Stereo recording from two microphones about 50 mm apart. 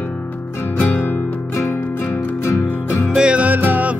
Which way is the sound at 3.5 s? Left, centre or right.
Right.